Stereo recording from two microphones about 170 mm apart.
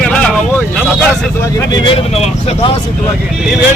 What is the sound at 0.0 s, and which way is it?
Vehicle, 5° left (ahead or behind).